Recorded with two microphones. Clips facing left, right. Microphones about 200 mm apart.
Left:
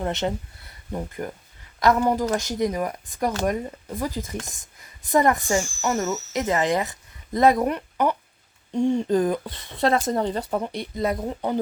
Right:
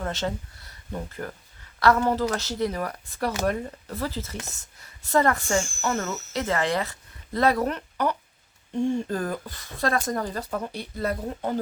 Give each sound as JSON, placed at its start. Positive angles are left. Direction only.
{"t": 0.0, "sound": "a woman's voice", "side_deg": 20}